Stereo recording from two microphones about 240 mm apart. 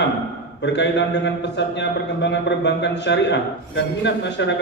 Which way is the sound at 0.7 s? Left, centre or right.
Left.